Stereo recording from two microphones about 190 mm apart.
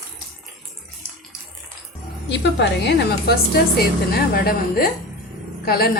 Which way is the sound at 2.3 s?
60° left (ahead or behind).